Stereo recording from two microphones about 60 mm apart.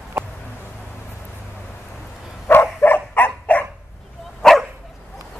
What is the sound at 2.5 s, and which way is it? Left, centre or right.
Dog, left.